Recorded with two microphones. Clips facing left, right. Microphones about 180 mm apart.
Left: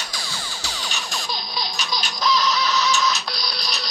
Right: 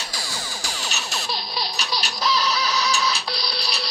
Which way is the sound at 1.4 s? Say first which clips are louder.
Even; 30° right (ahead or behind).